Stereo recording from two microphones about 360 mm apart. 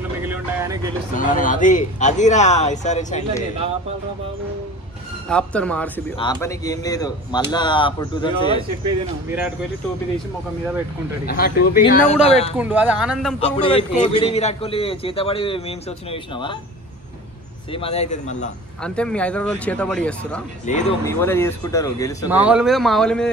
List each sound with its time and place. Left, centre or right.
0.2 s vehicle: centre
1.1 s speech: left
5.3 s a man's voice: centre
11.2 s speech: left
12.5 s speech: centre
13.7 s a man's voice: centre
17.7 s speech: centre
18.8 s speech: centre
20.7 s speech: centre
21.0 s a man's voice: centre
22.3 s speech: centre